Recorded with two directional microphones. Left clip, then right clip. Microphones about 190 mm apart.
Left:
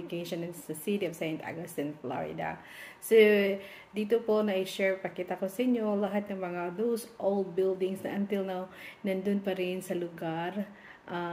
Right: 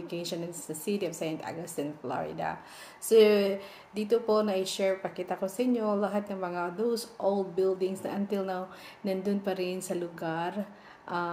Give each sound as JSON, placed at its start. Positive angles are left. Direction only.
{"t": 0.3, "sound": "a woman's voice", "side_deg": 5}
{"t": 3.1, "sound": "speech", "side_deg": 40}
{"t": 3.4, "sound": "a woman's voice", "side_deg": 10}